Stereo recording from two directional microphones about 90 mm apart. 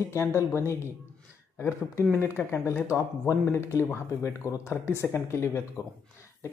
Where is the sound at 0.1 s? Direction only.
30° left (ahead or behind).